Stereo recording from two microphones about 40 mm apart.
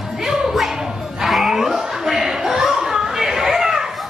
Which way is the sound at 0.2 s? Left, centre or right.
Centre.